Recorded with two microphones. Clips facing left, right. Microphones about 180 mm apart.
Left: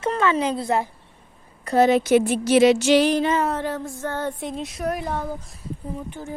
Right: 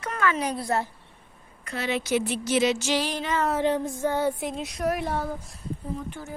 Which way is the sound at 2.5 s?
60° left (ahead or behind).